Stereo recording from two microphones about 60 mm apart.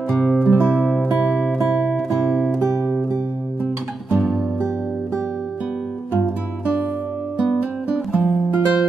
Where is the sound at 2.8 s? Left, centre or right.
Right.